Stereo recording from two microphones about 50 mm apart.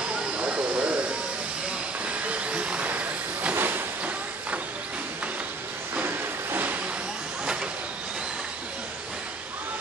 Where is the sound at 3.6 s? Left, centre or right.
Right.